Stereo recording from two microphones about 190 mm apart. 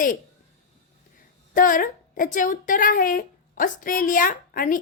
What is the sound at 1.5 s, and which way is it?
A woman's voice, 45° left (ahead or behind).